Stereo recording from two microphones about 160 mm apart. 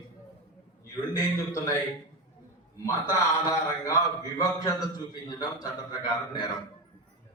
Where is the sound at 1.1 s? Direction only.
20° left (ahead or behind).